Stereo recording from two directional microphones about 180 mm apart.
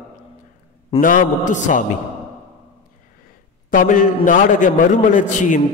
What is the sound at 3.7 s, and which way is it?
A man's voice, 45° left (ahead or behind).